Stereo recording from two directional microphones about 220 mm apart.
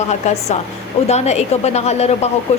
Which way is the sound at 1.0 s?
30° left (ahead or behind).